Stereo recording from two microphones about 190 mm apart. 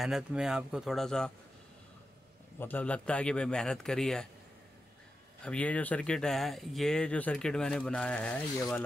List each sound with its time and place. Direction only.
0.0 s speech: 5° right (ahead or behind)
2.6 s speech: 10° left (ahead or behind)
5.4 s speech: 5° left (ahead or behind)
8.5 s speech: 15° left (ahead or behind)